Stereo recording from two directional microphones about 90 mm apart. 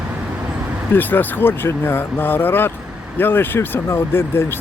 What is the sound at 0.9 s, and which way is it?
Speech, 20° left (ahead or behind).